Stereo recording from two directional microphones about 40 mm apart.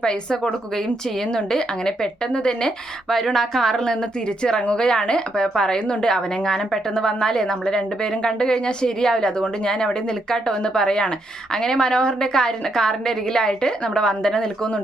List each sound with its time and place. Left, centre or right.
0.0 s a woman's voice: centre
4.7 s a woman's voice: left